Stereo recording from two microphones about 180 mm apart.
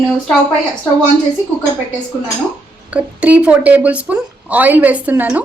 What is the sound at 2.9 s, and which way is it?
Speech, 5° right (ahead or behind).